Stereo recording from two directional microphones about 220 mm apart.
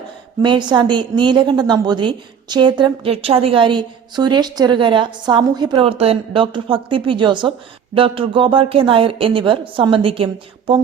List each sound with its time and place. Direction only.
0.4 s a woman's voice: 20° right (ahead or behind)